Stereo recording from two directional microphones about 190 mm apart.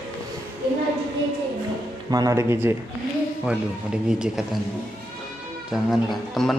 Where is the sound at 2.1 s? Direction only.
20° right (ahead or behind); by 4.6 s 5° right (ahead or behind).